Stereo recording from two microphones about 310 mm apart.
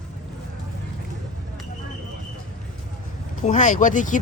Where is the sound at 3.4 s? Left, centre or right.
Left.